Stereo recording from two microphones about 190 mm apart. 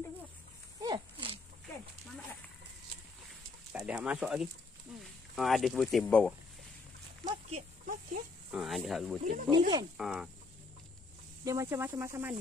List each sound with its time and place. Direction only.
0.7 s a sound: 20° right (ahead or behind)
3.7 s speech: 5° right (ahead or behind)
7.2 s a sound: 40° right (ahead or behind)
8.5 s speech: centre (ahead or behind)
9.2 s speech: 40° right (ahead or behind)
9.9 s speech: centre (ahead or behind)
11.4 s speech: 15° right (ahead or behind)